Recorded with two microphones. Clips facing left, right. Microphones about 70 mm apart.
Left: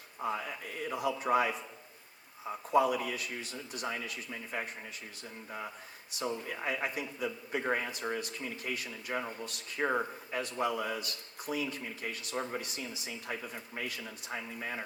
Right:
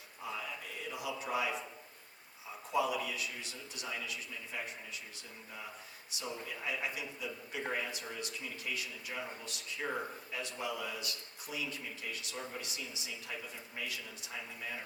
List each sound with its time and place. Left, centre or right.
0.2 s speech: left
6.1 s speech: left